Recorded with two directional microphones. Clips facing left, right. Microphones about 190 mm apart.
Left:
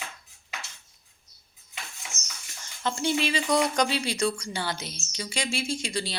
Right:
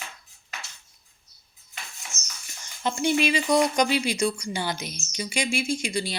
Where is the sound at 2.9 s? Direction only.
15° right (ahead or behind).